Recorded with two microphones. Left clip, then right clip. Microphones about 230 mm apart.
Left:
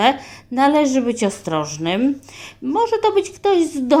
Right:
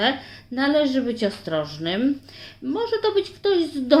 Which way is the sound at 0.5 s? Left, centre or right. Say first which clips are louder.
Left 5 dB; left.